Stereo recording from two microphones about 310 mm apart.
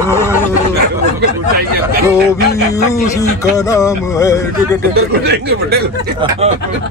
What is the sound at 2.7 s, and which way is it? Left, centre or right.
Speech, centre.